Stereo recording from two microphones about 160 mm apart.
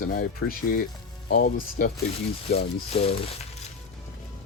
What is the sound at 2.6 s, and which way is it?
Speech, 35° left (ahead or behind).